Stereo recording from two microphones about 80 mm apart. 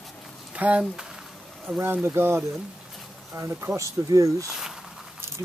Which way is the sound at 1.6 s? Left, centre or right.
Right.